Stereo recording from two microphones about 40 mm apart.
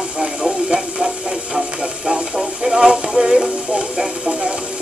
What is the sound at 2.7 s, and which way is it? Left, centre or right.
Speech, right.